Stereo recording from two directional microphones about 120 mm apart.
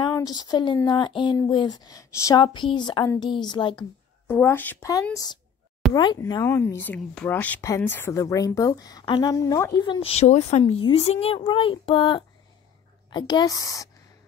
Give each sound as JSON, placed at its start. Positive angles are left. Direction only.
{"t": 0.1, "sound": "speech", "side_deg": 35}
{"t": 2.4, "sound": "speech", "side_deg": 40}
{"t": 4.3, "sound": "speech", "side_deg": 15}
{"t": 5.1, "sound": "speech", "side_deg": 35}
{"t": 6.4, "sound": "a woman's voice", "side_deg": 20}
{"t": 9.8, "sound": "speech", "side_deg": 45}
{"t": 10.1, "sound": "speech", "side_deg": 70}
{"t": 10.6, "sound": "a woman's voice", "side_deg": 45}